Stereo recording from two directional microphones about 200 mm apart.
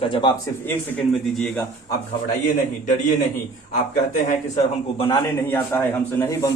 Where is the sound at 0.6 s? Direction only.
10° left (ahead or behind).